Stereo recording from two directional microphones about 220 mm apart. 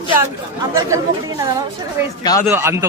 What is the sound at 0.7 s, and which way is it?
Speech, 15° right (ahead or behind).